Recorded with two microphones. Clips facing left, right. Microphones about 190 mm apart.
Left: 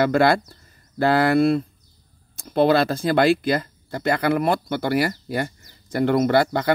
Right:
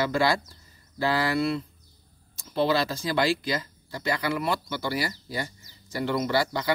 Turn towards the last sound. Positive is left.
turn(degrees=55)  # may be behind; listen again after turning